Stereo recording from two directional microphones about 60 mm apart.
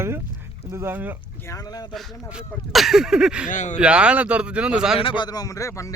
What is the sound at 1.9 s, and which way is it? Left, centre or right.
Speech, centre.